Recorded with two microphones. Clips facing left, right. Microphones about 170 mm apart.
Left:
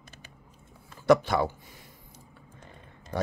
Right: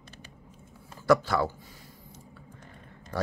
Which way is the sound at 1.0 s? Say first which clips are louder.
Left 2 dB; 20° left (ahead or behind).